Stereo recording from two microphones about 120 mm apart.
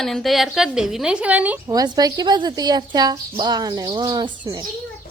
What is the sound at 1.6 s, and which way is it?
A woman's voice, 30° right (ahead or behind).